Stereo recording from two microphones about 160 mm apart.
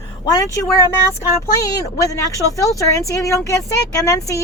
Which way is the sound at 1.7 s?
20° left (ahead or behind).